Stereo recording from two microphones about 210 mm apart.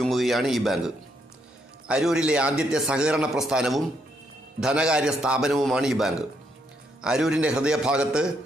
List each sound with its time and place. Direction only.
0.0 s a man's voice: centre (ahead or behind)
1.9 s a man's voice: 5° right (ahead or behind)